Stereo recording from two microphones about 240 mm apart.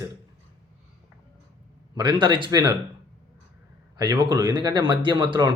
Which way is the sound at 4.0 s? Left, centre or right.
Centre.